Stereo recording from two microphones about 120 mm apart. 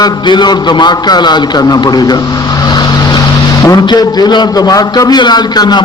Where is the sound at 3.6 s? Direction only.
35° left (ahead or behind).